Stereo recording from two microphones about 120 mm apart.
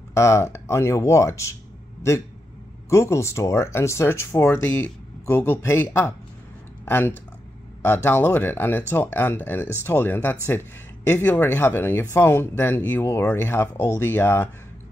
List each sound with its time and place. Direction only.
0.1 s speech: 25° left (ahead or behind)
2.9 s speech: 25° left (ahead or behind)